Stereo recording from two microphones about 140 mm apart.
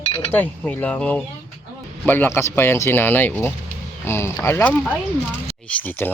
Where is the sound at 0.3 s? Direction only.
10° left (ahead or behind).